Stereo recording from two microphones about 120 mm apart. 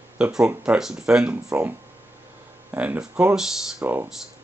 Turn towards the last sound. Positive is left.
turn(degrees=-5)  # may be behind; listen again after turning